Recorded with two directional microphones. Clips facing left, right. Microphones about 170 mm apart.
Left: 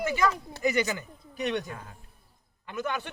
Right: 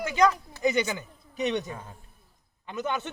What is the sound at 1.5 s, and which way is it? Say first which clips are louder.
Speech: right 1 dB; 20° right (ahead or behind).